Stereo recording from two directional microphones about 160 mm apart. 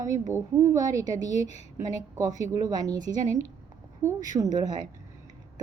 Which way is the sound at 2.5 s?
25° right (ahead or behind).